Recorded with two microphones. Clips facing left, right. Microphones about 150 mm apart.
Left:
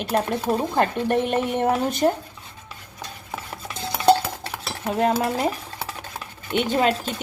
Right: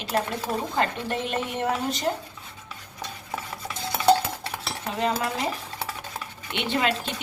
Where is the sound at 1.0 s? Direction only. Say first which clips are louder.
Left 7 dB; 55° left (ahead or behind).